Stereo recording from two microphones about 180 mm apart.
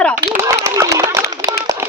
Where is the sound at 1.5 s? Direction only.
25° right (ahead or behind).